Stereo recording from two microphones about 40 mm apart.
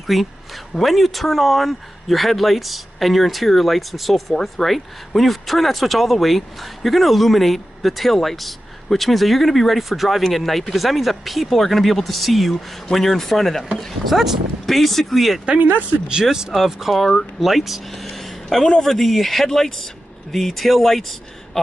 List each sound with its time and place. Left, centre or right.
0.0 s a man's voice: centre
16.1 s speech: centre
16.5 s speech: centre